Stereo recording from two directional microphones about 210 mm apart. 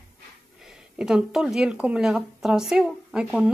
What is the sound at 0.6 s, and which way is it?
Speech, centre (ahead or behind).